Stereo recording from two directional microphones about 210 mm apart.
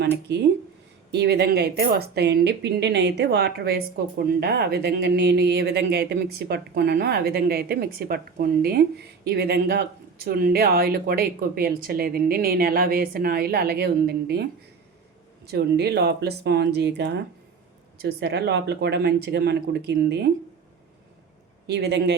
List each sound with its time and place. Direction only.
1.1 s speech: 50° right (ahead or behind)
15.4 s speech: 50° right (ahead or behind)
21.7 s speech: 50° right (ahead or behind)